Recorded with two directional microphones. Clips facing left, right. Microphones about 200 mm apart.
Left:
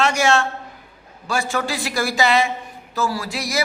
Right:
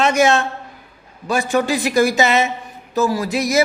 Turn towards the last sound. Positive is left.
turn(degrees=-20)  # may be behind; listen again after turning